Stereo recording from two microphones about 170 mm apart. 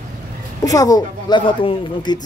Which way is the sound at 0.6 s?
20° left (ahead or behind).